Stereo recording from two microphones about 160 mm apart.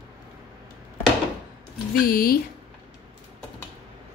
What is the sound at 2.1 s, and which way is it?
Speech, 70° left (ahead or behind).